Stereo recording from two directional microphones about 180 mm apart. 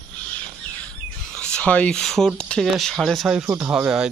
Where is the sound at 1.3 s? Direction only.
5° left (ahead or behind).